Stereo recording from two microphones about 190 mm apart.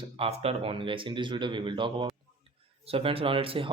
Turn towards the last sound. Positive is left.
turn(degrees=-30)  # may be behind; listen again after turning